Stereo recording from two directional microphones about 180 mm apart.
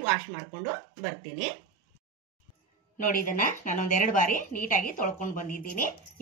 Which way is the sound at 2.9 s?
45° left (ahead or behind).